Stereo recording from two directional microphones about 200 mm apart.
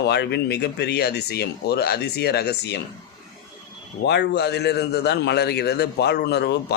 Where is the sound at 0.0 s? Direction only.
55° left (ahead or behind).